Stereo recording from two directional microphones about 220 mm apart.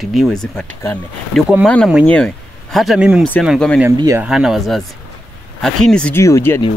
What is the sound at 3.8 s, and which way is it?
Speech, 10° right (ahead or behind).